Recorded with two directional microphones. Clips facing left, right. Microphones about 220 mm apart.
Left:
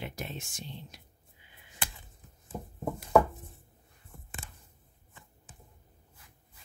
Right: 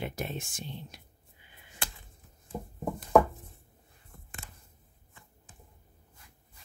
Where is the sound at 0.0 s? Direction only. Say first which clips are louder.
Right 4 dB; 50° right (ahead or behind).